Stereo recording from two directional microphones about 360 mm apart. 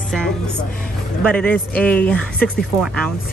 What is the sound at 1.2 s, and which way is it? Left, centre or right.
Speech, centre.